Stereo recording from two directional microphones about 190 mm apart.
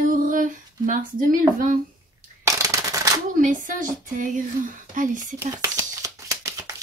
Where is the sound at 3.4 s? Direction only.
45° right (ahead or behind).